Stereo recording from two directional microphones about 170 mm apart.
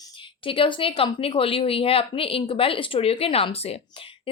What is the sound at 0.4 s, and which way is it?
Speech, 30° left (ahead or behind).